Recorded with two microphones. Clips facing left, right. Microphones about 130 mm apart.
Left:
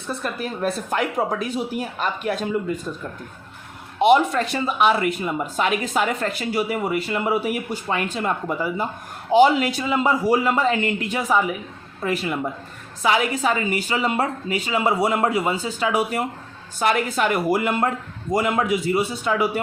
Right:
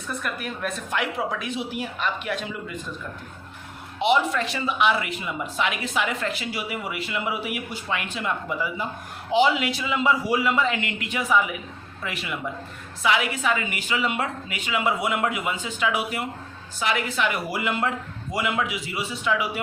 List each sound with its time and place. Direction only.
0.1 s a woman's voice: 30° left (ahead or behind)
4.0 s a woman's voice: 50° left (ahead or behind)